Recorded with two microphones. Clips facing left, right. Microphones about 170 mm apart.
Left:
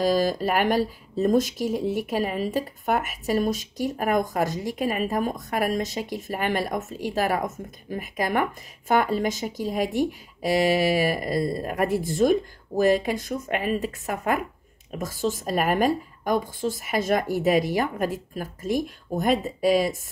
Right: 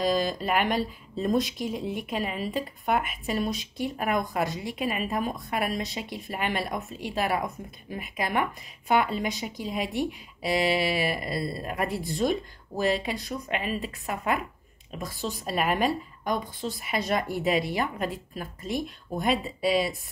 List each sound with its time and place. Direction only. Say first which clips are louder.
0.0 s speech: left 4 dB; 45° left (ahead or behind)